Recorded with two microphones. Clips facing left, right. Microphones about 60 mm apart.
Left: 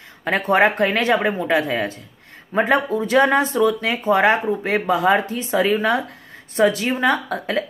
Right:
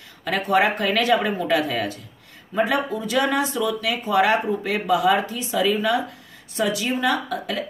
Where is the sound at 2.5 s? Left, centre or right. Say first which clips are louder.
Left 4 dB; left.